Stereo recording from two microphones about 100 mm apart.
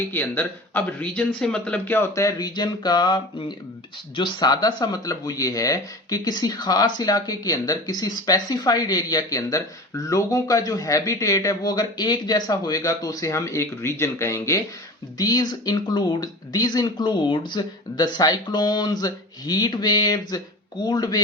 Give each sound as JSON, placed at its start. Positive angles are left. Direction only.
{"t": 0.1, "sound": "speech", "side_deg": 20}
{"t": 2.1, "sound": "speech", "side_deg": 40}
{"t": 15.2, "sound": "speech", "side_deg": 40}